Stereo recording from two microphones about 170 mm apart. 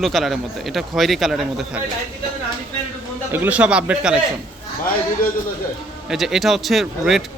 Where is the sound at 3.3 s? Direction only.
10° right (ahead or behind).